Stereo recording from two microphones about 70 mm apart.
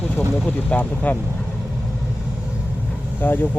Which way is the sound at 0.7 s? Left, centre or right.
Left.